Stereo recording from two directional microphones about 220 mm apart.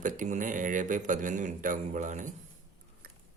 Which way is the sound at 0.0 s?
35° right (ahead or behind).